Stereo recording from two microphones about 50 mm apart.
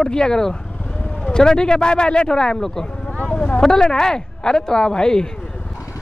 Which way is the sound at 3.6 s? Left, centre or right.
Centre.